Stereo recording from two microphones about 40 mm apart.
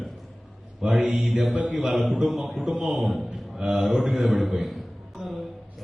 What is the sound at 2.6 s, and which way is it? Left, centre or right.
Mantra, centre.